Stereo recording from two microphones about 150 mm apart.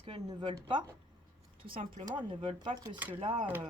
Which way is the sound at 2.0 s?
35° right (ahead or behind).